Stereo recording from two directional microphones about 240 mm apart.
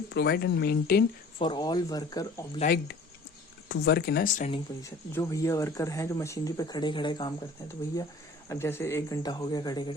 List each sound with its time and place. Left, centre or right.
0.1 s speech: left
1.4 s speech: centre
2.6 s speech: left
4.8 s speech: centre
8.4 s speech: centre